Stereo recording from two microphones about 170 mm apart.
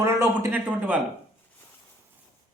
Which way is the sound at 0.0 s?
15° right (ahead or behind).